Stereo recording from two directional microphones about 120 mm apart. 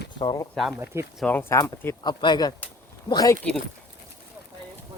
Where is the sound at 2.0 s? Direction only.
35° left (ahead or behind).